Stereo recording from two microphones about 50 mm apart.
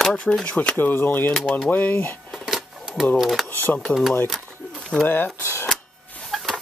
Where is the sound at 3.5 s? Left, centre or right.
Left.